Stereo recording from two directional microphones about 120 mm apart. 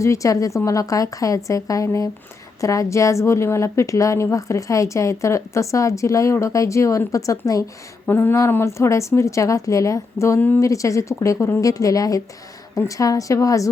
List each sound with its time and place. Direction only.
0.0 s a woman's voice: 25° left (ahead or behind)
8.0 s a woman's voice: 15° left (ahead or behind)